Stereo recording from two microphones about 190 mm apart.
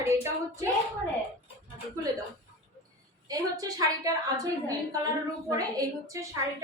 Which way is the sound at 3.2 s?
20° right (ahead or behind).